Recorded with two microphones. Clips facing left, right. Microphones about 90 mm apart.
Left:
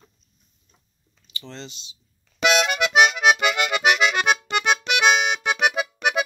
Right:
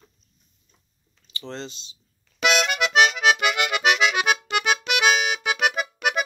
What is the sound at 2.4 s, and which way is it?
Accordion, 5° left (ahead or behind).